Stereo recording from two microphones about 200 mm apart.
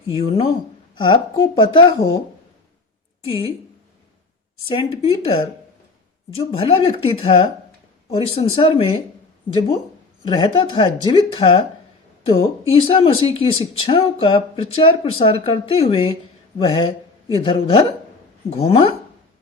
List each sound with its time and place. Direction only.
0.1 s speech: 25° left (ahead or behind)
3.2 s speech: 25° left (ahead or behind)
4.7 s speech: 25° left (ahead or behind)
6.3 s speech: 30° left (ahead or behind)